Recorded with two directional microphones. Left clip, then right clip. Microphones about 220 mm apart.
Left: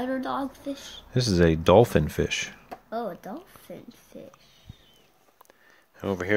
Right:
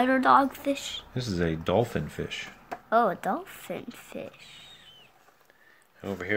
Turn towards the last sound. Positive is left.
turn(degrees=40)  # may be behind; listen again after turning